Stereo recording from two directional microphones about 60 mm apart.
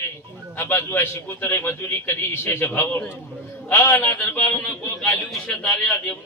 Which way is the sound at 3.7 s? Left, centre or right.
Left.